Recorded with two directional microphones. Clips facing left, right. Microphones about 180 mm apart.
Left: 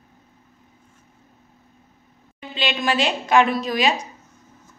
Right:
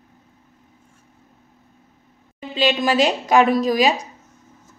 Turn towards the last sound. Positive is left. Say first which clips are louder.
# right 4 dB
turn(degrees=-40)  # may be behind; listen again after turning